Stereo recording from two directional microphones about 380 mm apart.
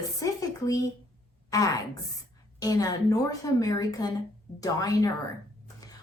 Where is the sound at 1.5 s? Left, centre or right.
Centre.